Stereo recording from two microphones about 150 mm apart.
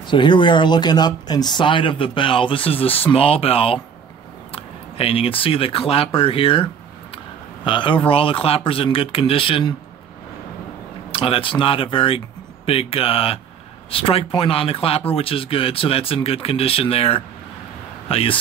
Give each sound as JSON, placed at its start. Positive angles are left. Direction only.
{"t": 0.0, "sound": "speech", "side_deg": 30}
{"t": 11.1, "sound": "speech", "side_deg": 40}